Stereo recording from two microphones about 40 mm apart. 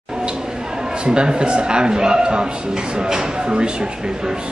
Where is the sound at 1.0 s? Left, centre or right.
Right.